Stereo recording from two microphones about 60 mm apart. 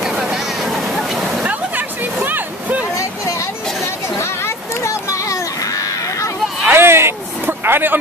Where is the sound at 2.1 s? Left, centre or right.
Right.